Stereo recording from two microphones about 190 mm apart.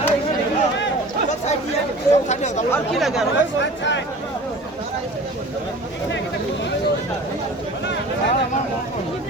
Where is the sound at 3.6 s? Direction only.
70° left (ahead or behind).